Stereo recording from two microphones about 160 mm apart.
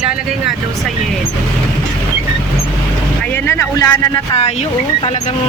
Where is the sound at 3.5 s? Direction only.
15° left (ahead or behind).